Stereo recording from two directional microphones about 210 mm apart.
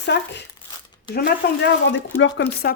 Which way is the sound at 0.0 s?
55° left (ahead or behind).